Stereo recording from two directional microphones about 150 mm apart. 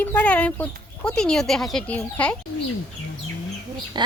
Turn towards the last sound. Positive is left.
turn(degrees=-30)  # may be behind; listen again after turning